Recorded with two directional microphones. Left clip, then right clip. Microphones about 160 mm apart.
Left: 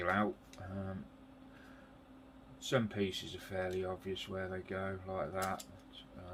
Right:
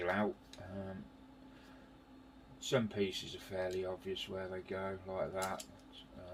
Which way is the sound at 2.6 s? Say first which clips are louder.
Even; 30° left (ahead or behind).